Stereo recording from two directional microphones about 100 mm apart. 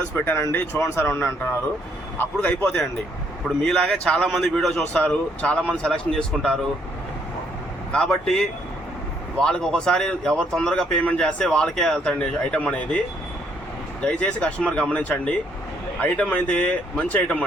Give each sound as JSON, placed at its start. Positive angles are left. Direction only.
{"t": 0.3, "sound": "speech", "side_deg": 20}
{"t": 7.9, "sound": "speech", "side_deg": 5}
{"t": 14.0, "sound": "speech", "side_deg": 10}